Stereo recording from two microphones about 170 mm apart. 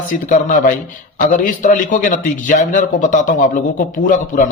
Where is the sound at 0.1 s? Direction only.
50° left (ahead or behind).